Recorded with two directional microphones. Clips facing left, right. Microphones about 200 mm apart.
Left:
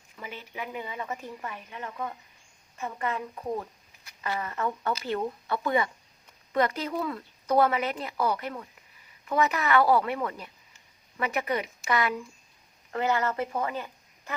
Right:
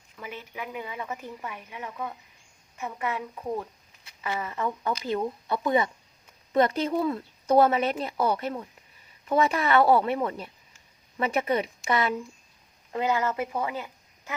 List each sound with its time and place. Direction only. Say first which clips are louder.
0.2 s speech: right 1 dB; 5° right (ahead or behind); by 12.1 s 25° right (ahead or behind)
12.9 s speech: right 1 dB; 15° right (ahead or behind)